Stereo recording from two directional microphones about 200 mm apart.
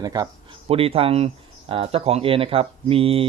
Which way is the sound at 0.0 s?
20° right (ahead or behind).